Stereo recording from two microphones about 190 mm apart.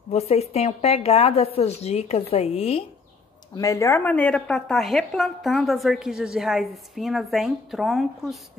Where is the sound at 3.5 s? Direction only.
15° left (ahead or behind); by 8.5 s centre (ahead or behind).